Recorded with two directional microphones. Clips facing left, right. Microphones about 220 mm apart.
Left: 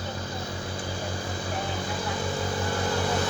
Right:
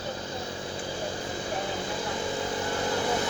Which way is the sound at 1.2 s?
20° right (ahead or behind).